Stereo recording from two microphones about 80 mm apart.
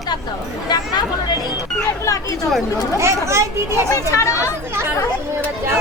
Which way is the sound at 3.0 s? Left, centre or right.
Right.